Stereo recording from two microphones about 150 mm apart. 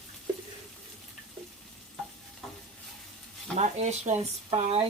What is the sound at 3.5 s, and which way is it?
Speech, 50° right (ahead or behind).